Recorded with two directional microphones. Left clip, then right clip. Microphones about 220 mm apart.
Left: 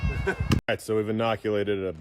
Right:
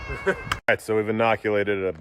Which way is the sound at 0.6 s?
50° right (ahead or behind).